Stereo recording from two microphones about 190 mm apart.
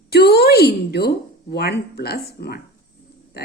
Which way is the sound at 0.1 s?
55° left (ahead or behind).